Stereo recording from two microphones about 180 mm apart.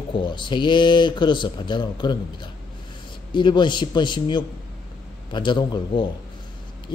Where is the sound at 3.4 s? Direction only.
25° left (ahead or behind).